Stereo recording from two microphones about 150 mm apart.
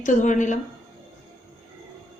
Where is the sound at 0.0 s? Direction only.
55° left (ahead or behind).